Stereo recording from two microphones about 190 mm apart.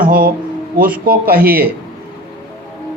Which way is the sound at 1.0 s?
50° right (ahead or behind).